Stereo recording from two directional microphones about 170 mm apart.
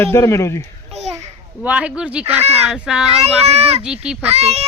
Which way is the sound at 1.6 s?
5° right (ahead or behind).